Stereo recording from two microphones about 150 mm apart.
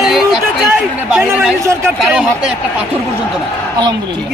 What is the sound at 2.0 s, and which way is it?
Speech, 5° right (ahead or behind).